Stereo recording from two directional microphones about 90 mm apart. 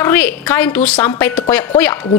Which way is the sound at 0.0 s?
25° left (ahead or behind).